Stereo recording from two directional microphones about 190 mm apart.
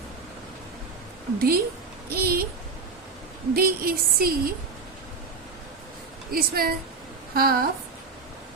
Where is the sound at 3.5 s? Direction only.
50° right (ahead or behind).